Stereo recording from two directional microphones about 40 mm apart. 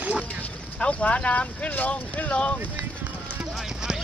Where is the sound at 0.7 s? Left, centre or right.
Left.